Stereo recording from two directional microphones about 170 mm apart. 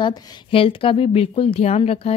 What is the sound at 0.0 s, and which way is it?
Speech, 30° left (ahead or behind).